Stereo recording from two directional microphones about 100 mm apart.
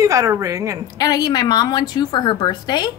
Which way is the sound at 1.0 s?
40° left (ahead or behind).